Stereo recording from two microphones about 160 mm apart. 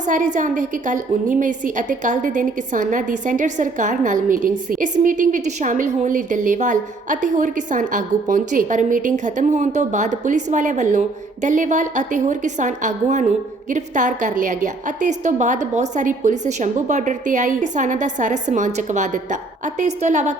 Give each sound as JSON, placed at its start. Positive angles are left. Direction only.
{"t": 0.0, "sound": "a woman's voice", "side_deg": -50}